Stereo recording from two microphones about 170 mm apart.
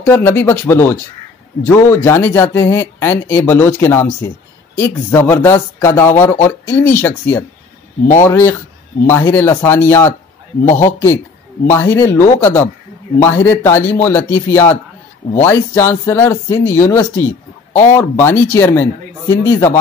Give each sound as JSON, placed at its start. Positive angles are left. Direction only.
{"t": 0.0, "sound": "speech", "side_deg": 10}